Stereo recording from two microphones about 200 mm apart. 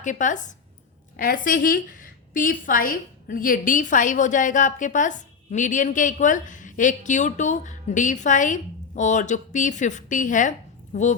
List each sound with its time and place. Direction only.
0.0 s a woman's voice: 40° left (ahead or behind)